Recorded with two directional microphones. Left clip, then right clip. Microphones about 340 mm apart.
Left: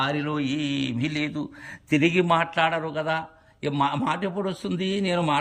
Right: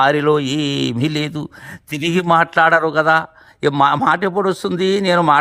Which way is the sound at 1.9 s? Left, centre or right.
Centre.